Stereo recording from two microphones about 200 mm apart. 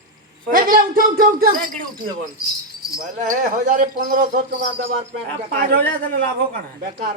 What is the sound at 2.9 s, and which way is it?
Speech, 40° right (ahead or behind).